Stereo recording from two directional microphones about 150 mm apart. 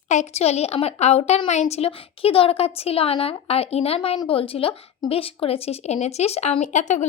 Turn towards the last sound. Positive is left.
turn(degrees=55)  # may be behind; listen again after turning